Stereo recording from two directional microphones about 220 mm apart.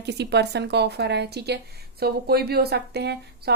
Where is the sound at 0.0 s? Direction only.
50° right (ahead or behind).